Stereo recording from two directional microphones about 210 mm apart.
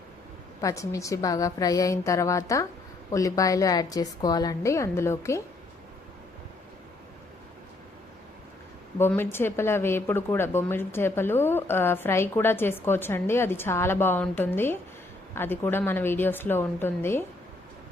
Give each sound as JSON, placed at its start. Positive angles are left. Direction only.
{"t": 0.6, "sound": "speech", "side_deg": 15}
{"t": 9.0, "sound": "speech", "side_deg": 10}